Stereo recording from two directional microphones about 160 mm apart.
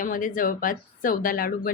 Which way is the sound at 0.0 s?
55° left (ahead or behind).